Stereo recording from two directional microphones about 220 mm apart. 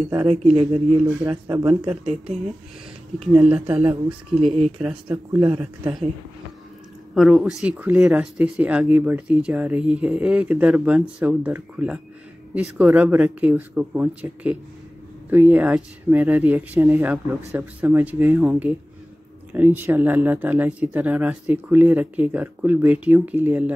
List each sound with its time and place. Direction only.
0.3 s speech: 30° right (ahead or behind)
1.2 s speech: 10° right (ahead or behind)
3.3 s speech: 5° right (ahead or behind)
7.2 s speech: centre (ahead or behind)